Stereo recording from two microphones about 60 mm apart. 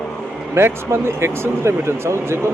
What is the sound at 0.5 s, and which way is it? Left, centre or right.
Speech, right.